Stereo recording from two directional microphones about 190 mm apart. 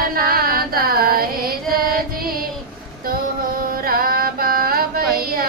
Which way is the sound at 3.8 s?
50° right (ahead or behind).